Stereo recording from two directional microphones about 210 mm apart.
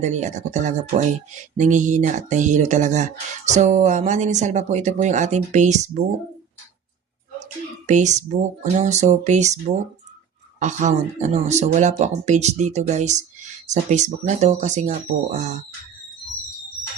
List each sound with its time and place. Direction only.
0.0 s speech: 35° right (ahead or behind)
7.9 s speech: 35° right (ahead or behind)